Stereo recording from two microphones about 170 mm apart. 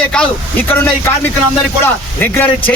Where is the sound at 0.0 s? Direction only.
5° left (ahead or behind).